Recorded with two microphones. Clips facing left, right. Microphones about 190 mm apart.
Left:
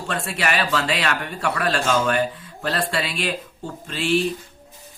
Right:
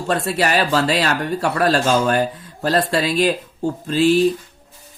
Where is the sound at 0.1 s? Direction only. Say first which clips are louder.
Right 6 dB; 40° right (ahead or behind).